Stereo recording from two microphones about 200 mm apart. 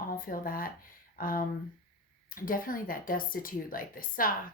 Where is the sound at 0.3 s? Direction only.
45° left (ahead or behind).